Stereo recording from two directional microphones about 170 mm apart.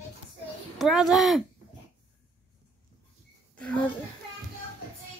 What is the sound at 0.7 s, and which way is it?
Speech, centre (ahead or behind).